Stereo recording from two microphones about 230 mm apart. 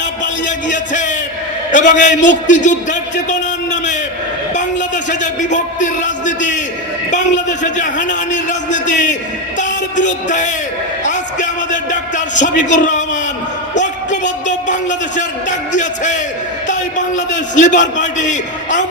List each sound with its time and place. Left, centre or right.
0.4 s a man's voice: left
4.5 s a man's voice: left
9.6 s music: left
10.2 s a man's voice: left
11.0 s a sound: left
13.7 s a man's voice: left
17.2 s a man's voice: left